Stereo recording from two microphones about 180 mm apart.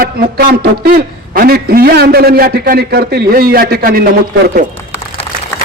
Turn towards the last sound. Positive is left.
turn(degrees=-55)  # may be behind; listen again after turning